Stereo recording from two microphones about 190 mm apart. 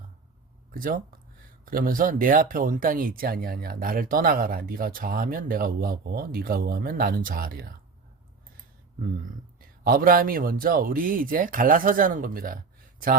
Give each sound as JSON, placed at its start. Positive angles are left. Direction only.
{"t": 0.7, "sound": "speech", "side_deg": -45}
{"t": 9.6, "sound": "speech", "side_deg": -50}